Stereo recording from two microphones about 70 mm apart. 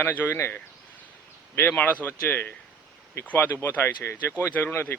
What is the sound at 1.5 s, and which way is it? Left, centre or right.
Speech, left.